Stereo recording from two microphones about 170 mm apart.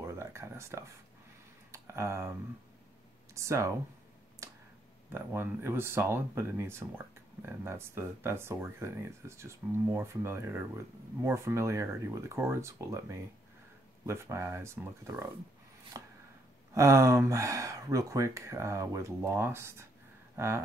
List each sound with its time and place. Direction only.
0.0 s a sound: 15° right (ahead or behind)
1.7 s speech: 15° right (ahead or behind)
3.3 s speech: 15° right (ahead or behind)
5.1 s speech: 15° right (ahead or behind)
16.0 s chopping: 20° right (ahead or behind)
16.7 s speech: 20° right (ahead or behind)
20.3 s a sound: 15° right (ahead or behind)